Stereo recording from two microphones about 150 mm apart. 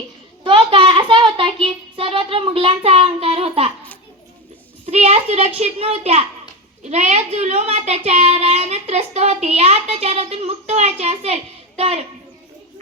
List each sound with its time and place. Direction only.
0.4 s child singing: 35° right (ahead or behind)
4.9 s a child's voice: 45° right (ahead or behind)